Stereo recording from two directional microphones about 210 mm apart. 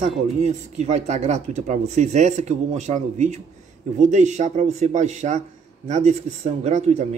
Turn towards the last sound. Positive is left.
turn(degrees=-35)  # may be behind; listen again after turning